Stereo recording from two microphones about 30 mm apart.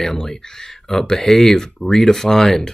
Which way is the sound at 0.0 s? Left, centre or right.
Centre.